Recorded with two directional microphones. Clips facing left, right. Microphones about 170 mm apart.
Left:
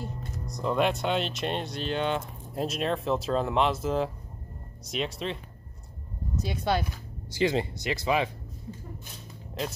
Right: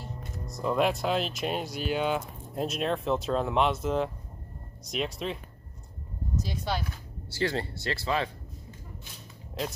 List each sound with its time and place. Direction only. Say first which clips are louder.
0.5 s speech: even; centre (ahead or behind)
6.4 s speech: left 6 dB; 55° left (ahead or behind)
7.2 s speech: left 4 dB; 15° left (ahead or behind)